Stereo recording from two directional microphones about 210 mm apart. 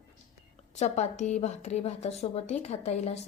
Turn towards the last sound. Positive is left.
turn(degrees=30)  # may be behind; listen again after turning